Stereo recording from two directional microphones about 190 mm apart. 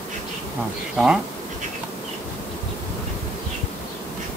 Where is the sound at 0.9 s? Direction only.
5° right (ahead or behind).